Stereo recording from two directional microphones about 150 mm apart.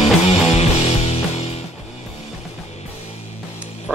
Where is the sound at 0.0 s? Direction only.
45° left (ahead or behind).